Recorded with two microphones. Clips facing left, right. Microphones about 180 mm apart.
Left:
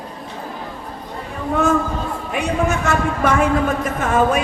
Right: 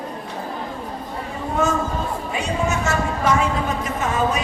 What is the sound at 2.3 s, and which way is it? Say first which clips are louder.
A man's voice: left 5 dB; 60° left (ahead or behind).